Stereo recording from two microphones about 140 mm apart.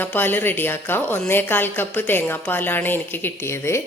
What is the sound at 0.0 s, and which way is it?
A woman's voice, 15° left (ahead or behind).